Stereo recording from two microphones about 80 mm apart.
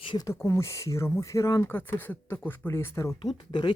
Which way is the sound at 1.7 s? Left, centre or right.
Left.